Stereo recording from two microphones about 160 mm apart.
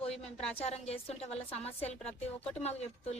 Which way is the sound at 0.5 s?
40° left (ahead or behind).